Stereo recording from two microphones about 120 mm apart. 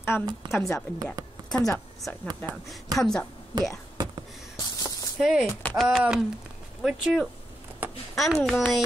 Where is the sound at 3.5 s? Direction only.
35° right (ahead or behind).